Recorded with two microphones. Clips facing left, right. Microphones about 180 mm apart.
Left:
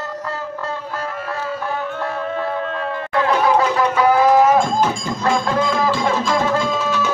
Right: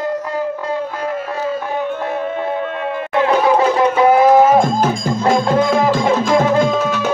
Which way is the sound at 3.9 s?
25° right (ahead or behind).